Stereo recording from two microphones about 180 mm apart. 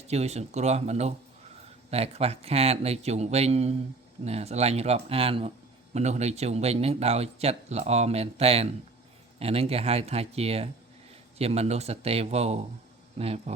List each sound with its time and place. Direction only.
0.1 s a man's voice: 35° right (ahead or behind)